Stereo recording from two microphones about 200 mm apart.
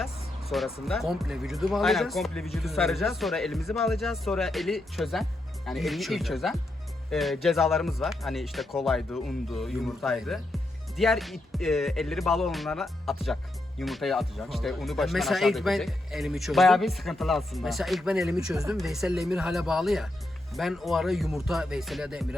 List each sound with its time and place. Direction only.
0.5 s speech: centre (ahead or behind)